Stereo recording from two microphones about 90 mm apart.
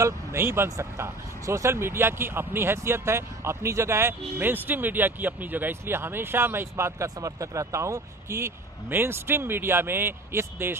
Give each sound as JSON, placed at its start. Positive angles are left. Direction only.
{"t": 0.0, "sound": "speech", "side_deg": -30}